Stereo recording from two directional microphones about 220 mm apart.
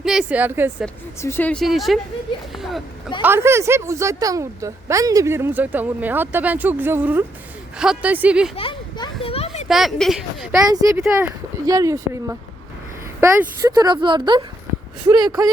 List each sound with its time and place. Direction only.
0.0 s speech: centre (ahead or behind)
1.2 s a woman's voice: 10° left (ahead or behind)
8.5 s a sound: 25° left (ahead or behind)
9.6 s speech: centre (ahead or behind)
10.5 s a woman's voice: 15° right (ahead or behind)
11.6 s a woman's voice: 15° right (ahead or behind)